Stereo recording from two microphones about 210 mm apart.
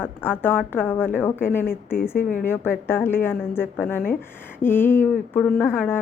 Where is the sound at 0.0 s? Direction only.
10° left (ahead or behind).